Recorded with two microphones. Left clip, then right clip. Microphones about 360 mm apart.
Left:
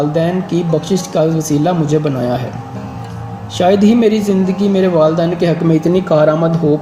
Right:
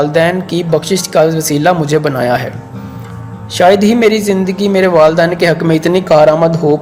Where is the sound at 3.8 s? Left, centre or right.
Right.